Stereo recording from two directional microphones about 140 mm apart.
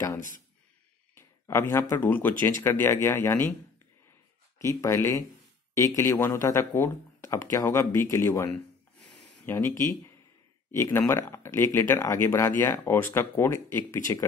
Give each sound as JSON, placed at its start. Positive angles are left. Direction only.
{"t": 1.1, "sound": "speech", "side_deg": 20}
{"t": 4.6, "sound": "speech", "side_deg": 20}
{"t": 9.5, "sound": "speech", "side_deg": 20}